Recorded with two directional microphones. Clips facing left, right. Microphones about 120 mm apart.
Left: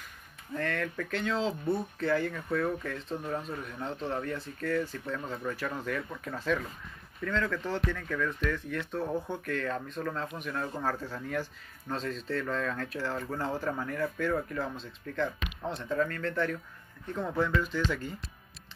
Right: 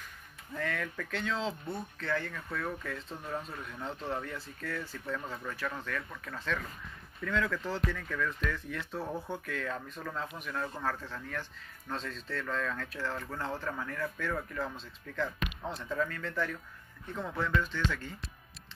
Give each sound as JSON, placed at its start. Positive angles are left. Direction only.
{"t": 0.6, "sound": "speech", "side_deg": -5}
{"t": 5.9, "sound": "speech", "side_deg": 25}
{"t": 7.2, "sound": "speech", "side_deg": 0}
{"t": 10.7, "sound": "speech", "side_deg": 15}